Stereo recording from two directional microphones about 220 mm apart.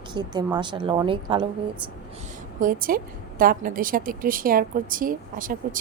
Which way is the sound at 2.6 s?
40° right (ahead or behind).